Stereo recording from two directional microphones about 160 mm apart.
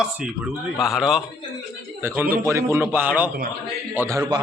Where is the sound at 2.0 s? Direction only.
15° right (ahead or behind).